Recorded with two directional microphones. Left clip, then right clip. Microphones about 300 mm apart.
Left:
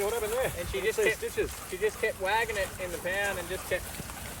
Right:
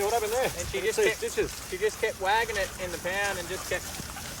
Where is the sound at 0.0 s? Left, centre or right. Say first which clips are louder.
Right 3 dB; right.